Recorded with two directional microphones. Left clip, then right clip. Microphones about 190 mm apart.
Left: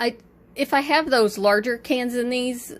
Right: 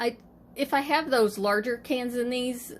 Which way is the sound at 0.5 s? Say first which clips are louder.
Left 5 dB; 30° left (ahead or behind).